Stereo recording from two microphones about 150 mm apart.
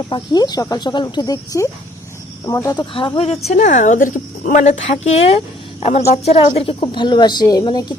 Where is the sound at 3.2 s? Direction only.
45° left (ahead or behind).